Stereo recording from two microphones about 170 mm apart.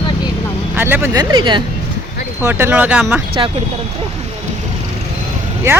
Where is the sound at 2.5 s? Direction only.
10° right (ahead or behind).